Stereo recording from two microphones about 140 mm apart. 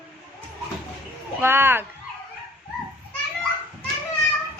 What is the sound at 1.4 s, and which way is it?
Speech, 15° right (ahead or behind).